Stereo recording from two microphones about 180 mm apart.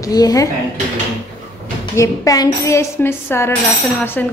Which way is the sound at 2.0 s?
20° left (ahead or behind).